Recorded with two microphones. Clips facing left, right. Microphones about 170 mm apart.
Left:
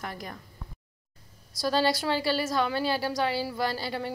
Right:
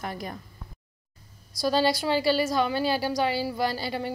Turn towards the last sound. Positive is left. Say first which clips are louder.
# right 2 dB
turn(degrees=-5)  # may be behind; listen again after turning